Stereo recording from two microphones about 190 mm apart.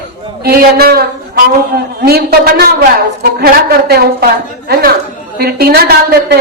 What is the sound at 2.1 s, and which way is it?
A woman's voice, 55° right (ahead or behind).